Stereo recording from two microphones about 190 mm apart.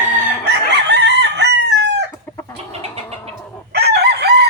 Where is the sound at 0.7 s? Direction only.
65° right (ahead or behind).